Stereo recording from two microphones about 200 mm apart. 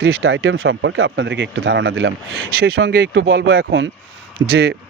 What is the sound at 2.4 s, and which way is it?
Speech, 50° right (ahead or behind).